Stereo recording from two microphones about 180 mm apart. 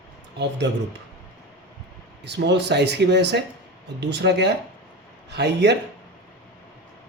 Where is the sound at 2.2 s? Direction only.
75° right (ahead or behind).